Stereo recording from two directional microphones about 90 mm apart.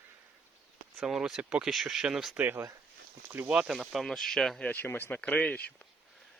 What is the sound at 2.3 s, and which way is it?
Speech, 25° right (ahead or behind).